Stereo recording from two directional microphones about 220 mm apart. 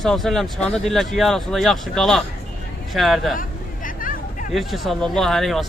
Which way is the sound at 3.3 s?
40° left (ahead or behind).